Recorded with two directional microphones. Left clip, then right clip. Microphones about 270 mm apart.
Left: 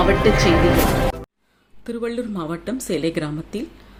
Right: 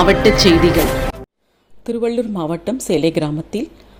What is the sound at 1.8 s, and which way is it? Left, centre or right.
Speech, centre.